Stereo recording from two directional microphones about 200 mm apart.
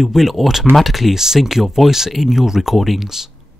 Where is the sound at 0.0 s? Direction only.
Centre (ahead or behind).